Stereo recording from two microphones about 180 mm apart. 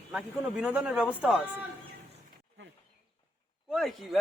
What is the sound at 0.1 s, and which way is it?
Speech, 5° right (ahead or behind).